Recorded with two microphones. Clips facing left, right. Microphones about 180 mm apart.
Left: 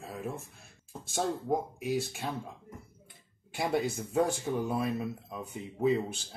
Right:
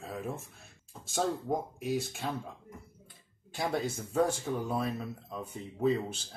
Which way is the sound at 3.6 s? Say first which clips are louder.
Left 2 dB; 10° left (ahead or behind).